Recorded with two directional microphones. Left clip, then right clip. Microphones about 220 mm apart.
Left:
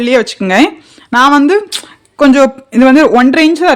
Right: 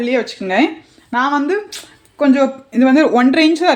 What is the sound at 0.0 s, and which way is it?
Speech, 35° left (ahead or behind).